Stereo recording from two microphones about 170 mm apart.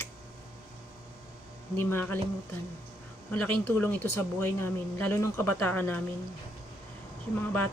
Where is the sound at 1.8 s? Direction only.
15° left (ahead or behind).